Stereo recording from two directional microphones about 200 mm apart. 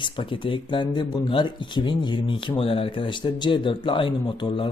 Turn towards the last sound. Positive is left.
turn(degrees=25)  # may be behind; listen again after turning